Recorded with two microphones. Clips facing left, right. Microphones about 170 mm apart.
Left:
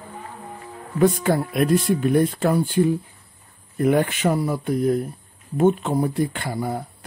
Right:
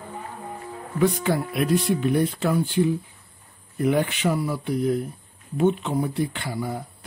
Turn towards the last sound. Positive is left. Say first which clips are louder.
# left 3 dB
turn(degrees=50)  # may be behind; listen again after turning